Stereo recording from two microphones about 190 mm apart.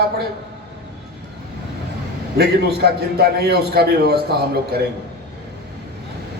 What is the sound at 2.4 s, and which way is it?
A man's voice, 55° right (ahead or behind).